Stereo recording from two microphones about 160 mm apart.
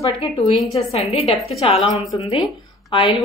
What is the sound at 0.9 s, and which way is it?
Speech, 40° left (ahead or behind).